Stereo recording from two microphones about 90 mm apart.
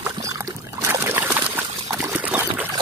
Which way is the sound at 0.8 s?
30° right (ahead or behind).